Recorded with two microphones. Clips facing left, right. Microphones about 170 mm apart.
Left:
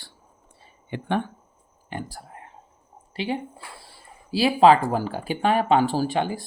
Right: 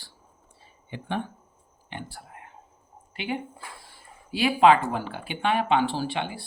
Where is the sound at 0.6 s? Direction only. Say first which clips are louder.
Left 6 dB; 60° left (ahead or behind).